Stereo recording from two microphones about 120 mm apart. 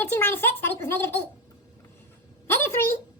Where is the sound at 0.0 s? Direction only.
20° left (ahead or behind).